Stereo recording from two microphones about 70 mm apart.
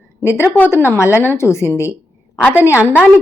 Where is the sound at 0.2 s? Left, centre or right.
Left.